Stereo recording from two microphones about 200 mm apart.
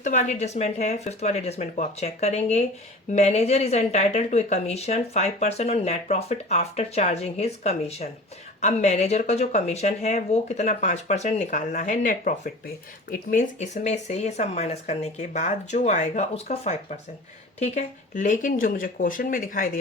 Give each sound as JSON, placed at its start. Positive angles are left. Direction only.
{"t": 0.0, "sound": "speech", "side_deg": 35}